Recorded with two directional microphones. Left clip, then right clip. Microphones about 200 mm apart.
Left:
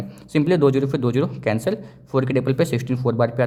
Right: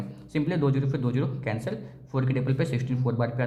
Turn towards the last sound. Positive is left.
turn(degrees=45)  # may be behind; listen again after turning